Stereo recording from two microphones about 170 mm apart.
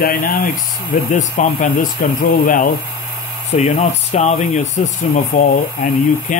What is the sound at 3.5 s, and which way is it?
Speech, 40° left (ahead or behind).